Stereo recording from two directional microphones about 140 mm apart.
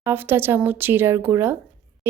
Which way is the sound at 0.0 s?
15° right (ahead or behind).